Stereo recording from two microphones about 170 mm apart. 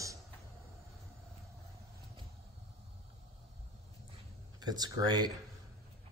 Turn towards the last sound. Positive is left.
turn(degrees=-25)  # may be behind; listen again after turning